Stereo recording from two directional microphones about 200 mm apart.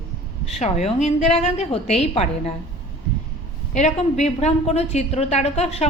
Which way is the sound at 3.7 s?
35° left (ahead or behind).